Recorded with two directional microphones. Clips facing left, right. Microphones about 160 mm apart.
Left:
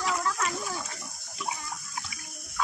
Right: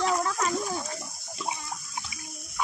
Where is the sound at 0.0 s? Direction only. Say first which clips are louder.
Right 3 dB; 35° right (ahead or behind).